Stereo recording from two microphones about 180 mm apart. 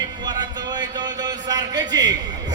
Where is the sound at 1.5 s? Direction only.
20° right (ahead or behind).